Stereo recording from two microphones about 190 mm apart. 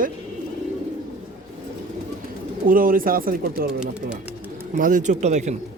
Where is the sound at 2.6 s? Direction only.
45° right (ahead or behind).